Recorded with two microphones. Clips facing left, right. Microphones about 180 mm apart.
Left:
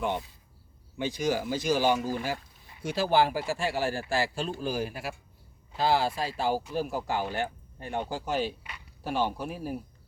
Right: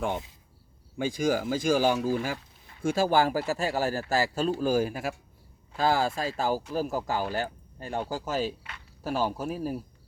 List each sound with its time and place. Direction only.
1.1 s speech: 50° right (ahead or behind)